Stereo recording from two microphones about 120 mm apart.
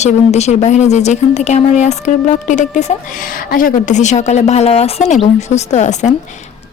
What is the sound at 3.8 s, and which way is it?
Speech, 80° left.